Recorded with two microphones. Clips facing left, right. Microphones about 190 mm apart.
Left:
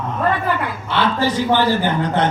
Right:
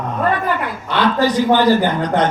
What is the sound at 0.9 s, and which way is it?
A man's voice, 15° right (ahead or behind).